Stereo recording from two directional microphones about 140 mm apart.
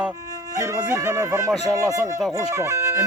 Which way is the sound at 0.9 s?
15° right (ahead or behind).